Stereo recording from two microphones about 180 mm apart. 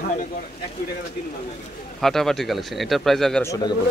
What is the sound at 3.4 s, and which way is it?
Speech, 15° left (ahead or behind).